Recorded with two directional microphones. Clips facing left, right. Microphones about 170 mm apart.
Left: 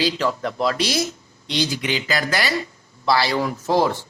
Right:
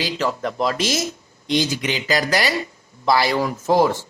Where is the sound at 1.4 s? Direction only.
45° right (ahead or behind).